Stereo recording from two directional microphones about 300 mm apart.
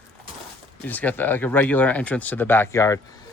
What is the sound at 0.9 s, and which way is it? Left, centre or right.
Speech, centre.